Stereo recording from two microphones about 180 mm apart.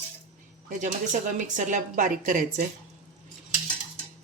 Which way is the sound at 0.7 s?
45° right (ahead or behind).